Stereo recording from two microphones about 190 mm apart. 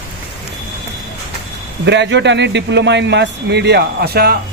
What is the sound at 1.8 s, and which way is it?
Speech, 70° right (ahead or behind).